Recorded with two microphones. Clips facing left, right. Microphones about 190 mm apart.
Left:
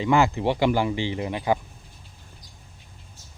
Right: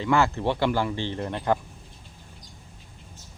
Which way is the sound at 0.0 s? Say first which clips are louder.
Left 2 dB; 15° left (ahead or behind).